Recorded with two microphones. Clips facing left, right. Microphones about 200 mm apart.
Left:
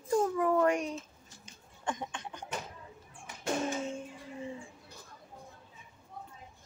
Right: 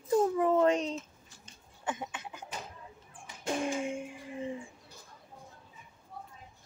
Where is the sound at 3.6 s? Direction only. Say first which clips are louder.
Right 2 dB; 15° right (ahead or behind).